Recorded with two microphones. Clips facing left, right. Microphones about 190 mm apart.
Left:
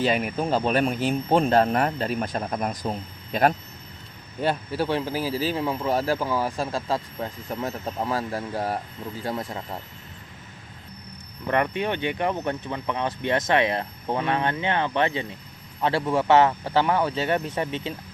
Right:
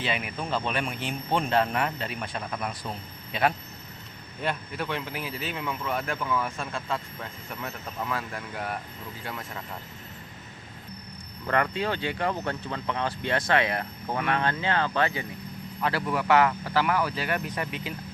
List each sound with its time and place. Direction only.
0.0 s speech: 45° left (ahead or behind)
4.4 s speech: 30° left (ahead or behind)
11.4 s speech: 20° left (ahead or behind)